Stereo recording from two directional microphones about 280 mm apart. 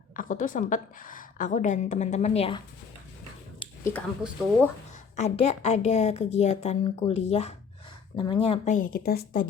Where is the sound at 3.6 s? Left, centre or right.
Centre.